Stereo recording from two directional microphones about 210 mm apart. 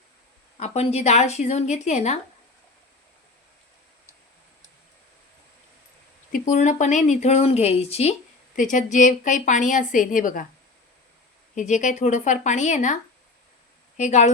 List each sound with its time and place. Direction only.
0.5 s a woman's voice: 30° left (ahead or behind)
6.3 s a woman's voice: 35° left (ahead or behind)
11.5 s a woman's voice: 35° left (ahead or behind)